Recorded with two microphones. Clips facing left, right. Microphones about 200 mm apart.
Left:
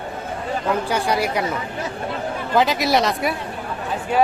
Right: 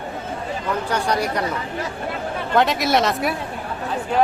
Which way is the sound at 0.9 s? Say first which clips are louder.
Left 1 dB; 10° left (ahead or behind).